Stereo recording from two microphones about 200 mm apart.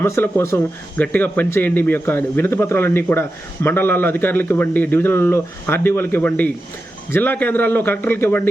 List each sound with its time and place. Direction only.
0.0 s speech: 10° left (ahead or behind)